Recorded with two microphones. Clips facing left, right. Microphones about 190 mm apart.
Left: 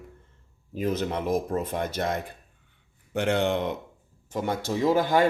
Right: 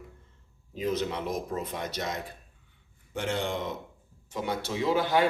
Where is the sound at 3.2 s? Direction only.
65° left (ahead or behind).